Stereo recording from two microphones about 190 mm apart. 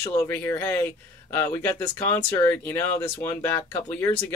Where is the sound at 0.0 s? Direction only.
15° left (ahead or behind).